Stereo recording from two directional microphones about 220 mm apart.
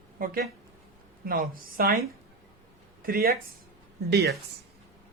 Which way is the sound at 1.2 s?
40° right (ahead or behind).